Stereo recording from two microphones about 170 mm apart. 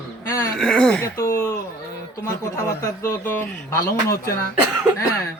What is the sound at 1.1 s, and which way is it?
Speech, 15° left (ahead or behind).